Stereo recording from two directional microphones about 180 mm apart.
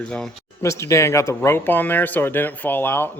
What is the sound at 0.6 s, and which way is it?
Speech, 15° left (ahead or behind).